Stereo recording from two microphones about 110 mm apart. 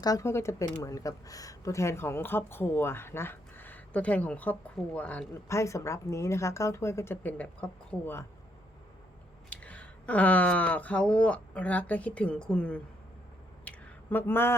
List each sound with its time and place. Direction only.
0.0 s speech: 30° left (ahead or behind); by 5.2 s 10° left (ahead or behind)
5.3 s speech: 25° left (ahead or behind)
9.5 s speech: 15° left (ahead or behind)
13.7 s a sound: 20° left (ahead or behind)